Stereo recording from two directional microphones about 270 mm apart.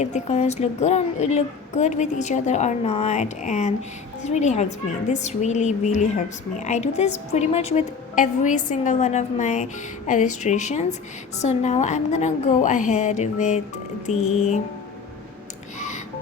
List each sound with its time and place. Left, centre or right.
0.0 s a woman's voice: left